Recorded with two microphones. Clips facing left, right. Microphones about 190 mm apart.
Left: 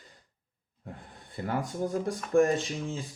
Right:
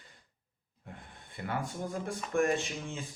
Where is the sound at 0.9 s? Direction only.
35° left (ahead or behind).